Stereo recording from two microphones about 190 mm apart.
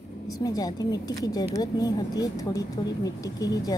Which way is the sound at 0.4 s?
20° left (ahead or behind).